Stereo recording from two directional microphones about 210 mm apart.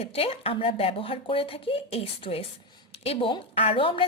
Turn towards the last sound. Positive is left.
turn(degrees=25)  # may be behind; listen again after turning